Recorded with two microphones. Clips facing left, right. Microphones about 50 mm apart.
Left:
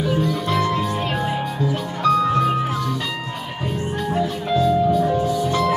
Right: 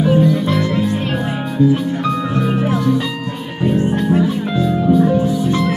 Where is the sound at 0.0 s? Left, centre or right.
Right.